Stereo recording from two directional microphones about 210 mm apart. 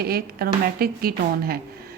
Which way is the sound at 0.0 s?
45° right (ahead or behind).